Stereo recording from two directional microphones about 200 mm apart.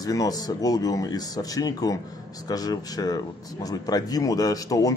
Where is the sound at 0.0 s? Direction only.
20° left (ahead or behind).